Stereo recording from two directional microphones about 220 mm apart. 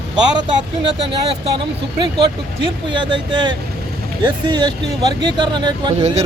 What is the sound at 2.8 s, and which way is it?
Speech, 20° right (ahead or behind).